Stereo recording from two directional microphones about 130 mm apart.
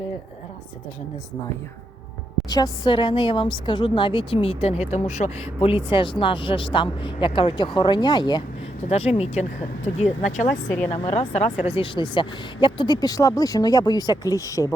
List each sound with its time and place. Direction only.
2.5 s speech: 35° left (ahead or behind)
4.9 s speech: 60° left (ahead or behind); by 8.4 s 35° left (ahead or behind)
8.9 s speech: 55° left (ahead or behind)
10.9 s speech: 50° left (ahead or behind)
11.7 s speech: 40° left (ahead or behind); by 14.8 s 25° left (ahead or behind)